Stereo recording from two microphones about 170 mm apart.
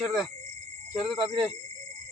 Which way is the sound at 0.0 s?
Centre (ahead or behind).